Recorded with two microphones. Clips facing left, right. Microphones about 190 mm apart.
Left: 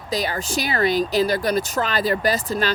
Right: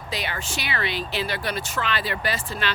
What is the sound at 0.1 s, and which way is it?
Speech, 40° left (ahead or behind).